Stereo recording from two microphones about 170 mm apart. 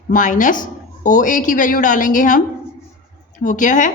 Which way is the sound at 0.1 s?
50° left (ahead or behind).